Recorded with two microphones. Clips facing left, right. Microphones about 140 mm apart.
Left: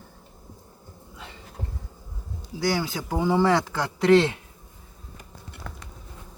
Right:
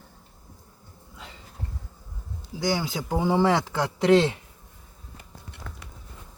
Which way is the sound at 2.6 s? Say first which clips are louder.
Left 1 dB; 20° right (ahead or behind).